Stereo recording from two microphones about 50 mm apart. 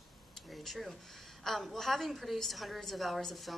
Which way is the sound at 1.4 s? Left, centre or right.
Centre.